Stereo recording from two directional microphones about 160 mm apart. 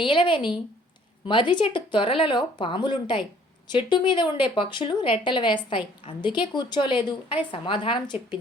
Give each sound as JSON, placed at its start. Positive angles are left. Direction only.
{"t": 0.0, "sound": "a woman's voice", "side_deg": 30}